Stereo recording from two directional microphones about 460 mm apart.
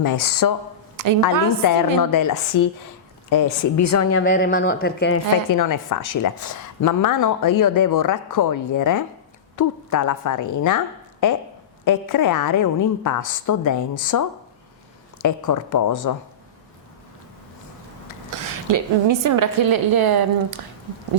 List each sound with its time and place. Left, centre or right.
0.0 s a woman's voice: left
4.2 s speech: centre
5.5 s a woman's voice: left
18.5 s a woman's voice: right